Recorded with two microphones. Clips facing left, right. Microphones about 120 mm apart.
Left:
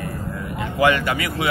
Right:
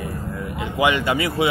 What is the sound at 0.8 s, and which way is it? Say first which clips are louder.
Speech: left 1 dB; 20° right (ahead or behind).